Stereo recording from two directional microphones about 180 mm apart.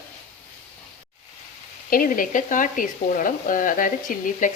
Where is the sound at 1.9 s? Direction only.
50° left (ahead or behind).